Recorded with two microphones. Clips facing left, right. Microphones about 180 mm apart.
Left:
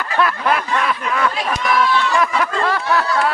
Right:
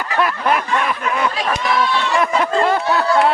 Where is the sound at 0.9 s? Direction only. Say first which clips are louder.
Even; 25° right (ahead or behind).